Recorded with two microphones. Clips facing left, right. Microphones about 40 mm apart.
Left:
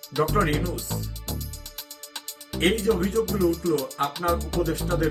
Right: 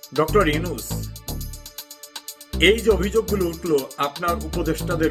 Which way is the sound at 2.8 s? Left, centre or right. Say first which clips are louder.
Right 4 dB; right.